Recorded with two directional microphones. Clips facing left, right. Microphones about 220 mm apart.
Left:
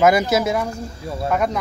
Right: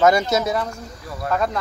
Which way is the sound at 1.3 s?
10° left (ahead or behind).